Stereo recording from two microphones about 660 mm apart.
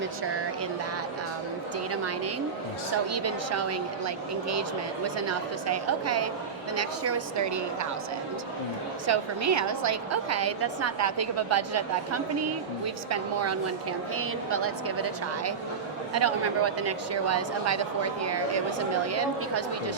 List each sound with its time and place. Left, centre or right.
1.9 s a woman's voice: right
5.6 s a woman's voice: right
9.0 s a woman's voice: right